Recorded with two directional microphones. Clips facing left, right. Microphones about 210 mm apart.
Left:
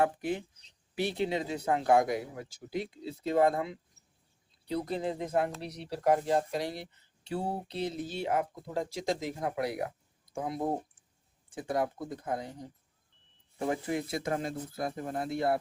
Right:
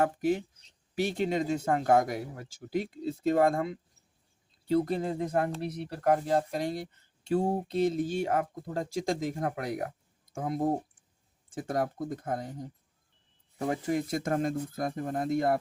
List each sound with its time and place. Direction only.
0.0 s speech: 45° right (ahead or behind)
13.7 s speech: 45° right (ahead or behind)